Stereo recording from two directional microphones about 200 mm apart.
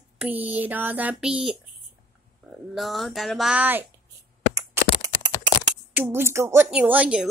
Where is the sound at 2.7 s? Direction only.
Centre (ahead or behind).